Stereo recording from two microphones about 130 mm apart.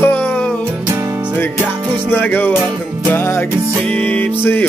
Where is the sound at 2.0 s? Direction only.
15° left (ahead or behind).